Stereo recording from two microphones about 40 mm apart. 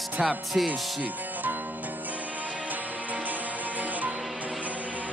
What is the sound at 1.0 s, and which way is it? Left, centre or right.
Music, right.